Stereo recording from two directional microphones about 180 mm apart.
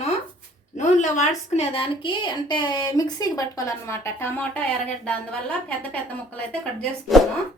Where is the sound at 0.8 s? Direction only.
40° left (ahead or behind); by 4.6 s 10° left (ahead or behind).